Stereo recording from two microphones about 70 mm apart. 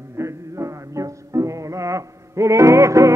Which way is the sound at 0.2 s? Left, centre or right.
Right.